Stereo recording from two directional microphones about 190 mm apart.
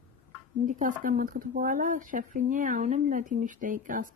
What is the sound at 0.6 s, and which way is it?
Speech, 45° right (ahead or behind).